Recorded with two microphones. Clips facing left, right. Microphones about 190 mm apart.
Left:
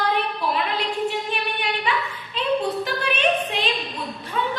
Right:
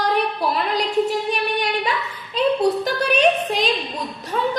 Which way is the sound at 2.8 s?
40° right (ahead or behind).